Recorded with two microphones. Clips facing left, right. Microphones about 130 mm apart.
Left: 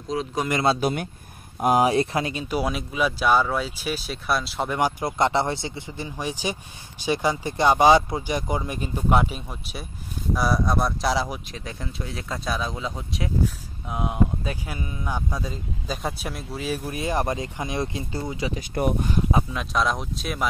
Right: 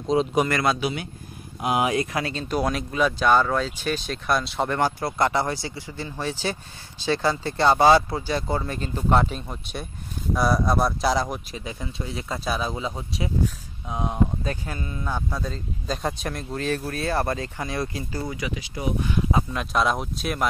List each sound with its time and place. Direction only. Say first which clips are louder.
0.1 s a man's voice: right 6 dB; 20° right (ahead or behind)
0.5 s speech: left 1 dB; 25° left (ahead or behind)
0.7 s speech: left 3 dB; 45° left (ahead or behind); by 2.2 s 30° left (ahead or behind)
2.2 s speech: right 1 dB; 10° left (ahead or behind)
4.7 s speech: left 2 dB; 15° left (ahead or behind)
18.5 s speech: left 4 dB; 50° left (ahead or behind)
19.5 s speech: right 1 dB; centre (ahead or behind)